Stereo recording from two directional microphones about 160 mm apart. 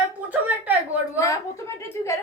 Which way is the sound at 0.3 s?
10° right (ahead or behind).